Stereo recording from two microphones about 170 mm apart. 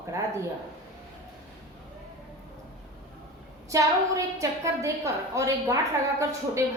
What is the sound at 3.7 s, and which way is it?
A woman's voice, 20° right (ahead or behind).